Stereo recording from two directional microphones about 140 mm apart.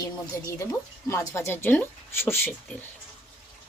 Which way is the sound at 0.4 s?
25° left (ahead or behind).